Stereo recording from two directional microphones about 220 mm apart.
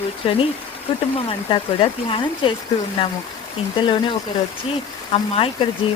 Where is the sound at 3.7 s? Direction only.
20° left (ahead or behind).